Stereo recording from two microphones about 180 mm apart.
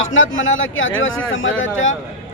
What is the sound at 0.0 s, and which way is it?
A man's voice, 90° left.